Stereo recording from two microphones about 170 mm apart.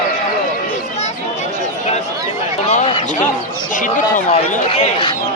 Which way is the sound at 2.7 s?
40° left (ahead or behind).